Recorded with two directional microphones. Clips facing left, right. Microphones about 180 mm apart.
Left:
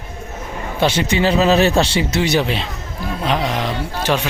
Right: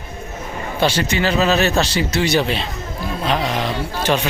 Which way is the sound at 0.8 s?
25° left (ahead or behind).